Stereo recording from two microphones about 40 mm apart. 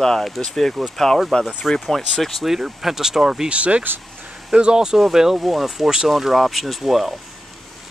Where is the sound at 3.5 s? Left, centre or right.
Right.